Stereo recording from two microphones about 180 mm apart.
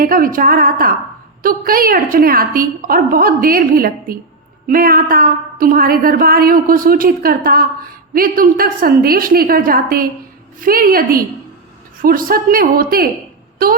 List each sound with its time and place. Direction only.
0.0 s a woman's voice: 50° right (ahead or behind)